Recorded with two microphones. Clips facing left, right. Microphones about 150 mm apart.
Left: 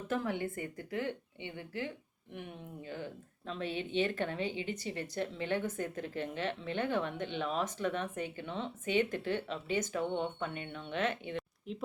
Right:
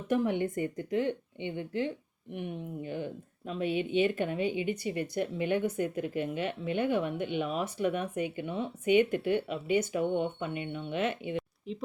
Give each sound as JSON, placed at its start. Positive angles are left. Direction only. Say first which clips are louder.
{"t": 0.1, "sound": "speech", "louder": "right 7 dB", "side_deg": -20}
{"t": 11.7, "sound": "speech", "louder": "right 3 dB", "side_deg": 0}